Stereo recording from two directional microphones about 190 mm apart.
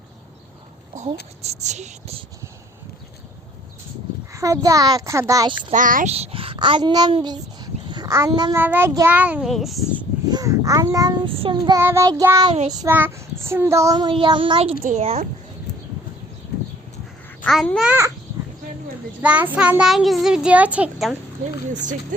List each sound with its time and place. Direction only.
1.4 s speech: 35° right (ahead or behind)
4.4 s a child's voice: 15° right (ahead or behind)
5.7 s a child's voice: 45° right (ahead or behind); by 8.5 s 20° right (ahead or behind)
8.5 s a child's voice: 10° right (ahead or behind)
10.2 s child singing: 20° right (ahead or behind)
11.8 s a child's voice: 15° right (ahead or behind)
12.5 s speech: 35° right (ahead or behind)
12.8 s a child's voice: 10° right (ahead or behind); by 15.3 s 35° right (ahead or behind)
17.4 s a child's voice: centre (ahead or behind)
19.2 s a child's voice: 10° right (ahead or behind)
21.7 s speech: 40° right (ahead or behind)